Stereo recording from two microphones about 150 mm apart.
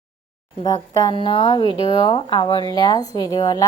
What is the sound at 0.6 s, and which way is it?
A woman's voice, 25° left (ahead or behind).